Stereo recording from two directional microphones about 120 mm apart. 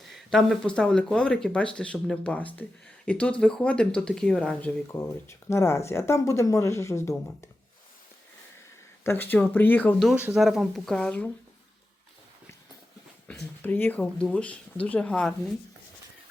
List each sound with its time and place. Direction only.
0.0 s speech: centre (ahead or behind); by 7.2 s 25° left (ahead or behind)
9.0 s speech: 15° left (ahead or behind)
10.3 s speech: centre (ahead or behind)
13.2 s speech: 10° left (ahead or behind)